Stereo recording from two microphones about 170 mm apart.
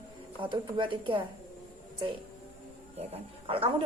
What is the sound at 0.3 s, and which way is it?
Speech, 30° right (ahead or behind).